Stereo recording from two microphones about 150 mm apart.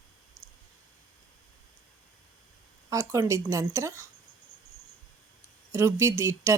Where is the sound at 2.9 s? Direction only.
20° right (ahead or behind).